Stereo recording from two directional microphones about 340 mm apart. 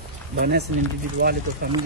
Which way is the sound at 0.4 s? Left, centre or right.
Right.